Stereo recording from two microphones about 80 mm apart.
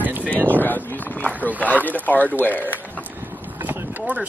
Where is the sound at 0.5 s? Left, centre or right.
Left.